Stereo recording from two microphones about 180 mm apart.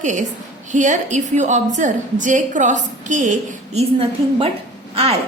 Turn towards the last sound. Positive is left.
turn(degrees=-35)  # may be behind; listen again after turning